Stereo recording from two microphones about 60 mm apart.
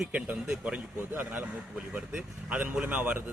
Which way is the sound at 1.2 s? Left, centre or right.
Right.